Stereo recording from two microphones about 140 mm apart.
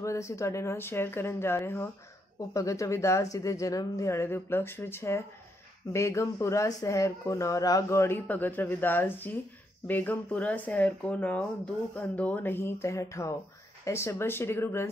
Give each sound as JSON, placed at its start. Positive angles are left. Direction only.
{"t": 0.0, "sound": "speech", "side_deg": 20}